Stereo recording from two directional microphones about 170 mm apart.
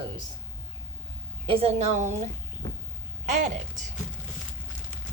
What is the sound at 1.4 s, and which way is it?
Speech, 35° right (ahead or behind).